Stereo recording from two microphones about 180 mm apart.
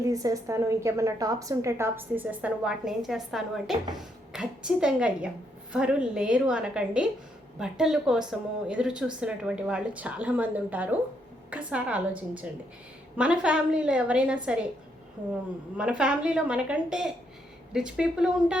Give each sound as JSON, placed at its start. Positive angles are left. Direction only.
{"t": 0.1, "sound": "a woman's voice", "side_deg": -20}